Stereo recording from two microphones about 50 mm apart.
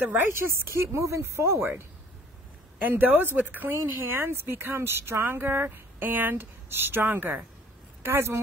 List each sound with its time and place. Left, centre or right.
0.0 s speech: right
0.3 s speech: right
2.8 s speech: right
3.8 s speech: right
8.0 s speech: right